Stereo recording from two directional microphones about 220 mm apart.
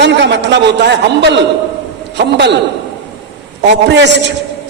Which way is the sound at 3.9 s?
50° right (ahead or behind).